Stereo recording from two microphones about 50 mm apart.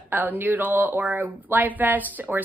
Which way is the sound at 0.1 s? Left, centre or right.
Right.